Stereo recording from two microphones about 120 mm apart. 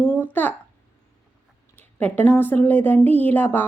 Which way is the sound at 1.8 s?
15° left (ahead or behind).